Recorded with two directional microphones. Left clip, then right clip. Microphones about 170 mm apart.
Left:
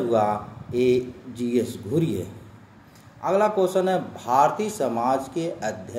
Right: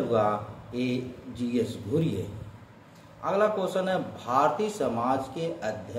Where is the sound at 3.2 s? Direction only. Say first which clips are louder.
Left 5 dB; 30° left (ahead or behind).